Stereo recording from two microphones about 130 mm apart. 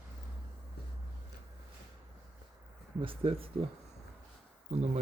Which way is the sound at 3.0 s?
45° right (ahead or behind).